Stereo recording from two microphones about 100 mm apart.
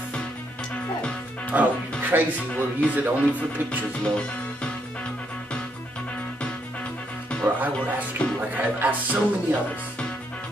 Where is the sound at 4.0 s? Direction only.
10° left (ahead or behind).